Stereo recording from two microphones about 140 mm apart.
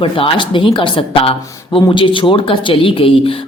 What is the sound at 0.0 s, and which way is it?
Speech, 35° left (ahead or behind).